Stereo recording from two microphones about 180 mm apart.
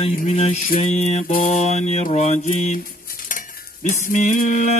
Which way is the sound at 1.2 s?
50° left (ahead or behind).